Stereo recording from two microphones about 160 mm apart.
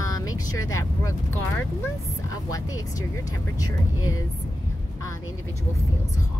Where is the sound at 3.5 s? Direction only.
20° left (ahead or behind).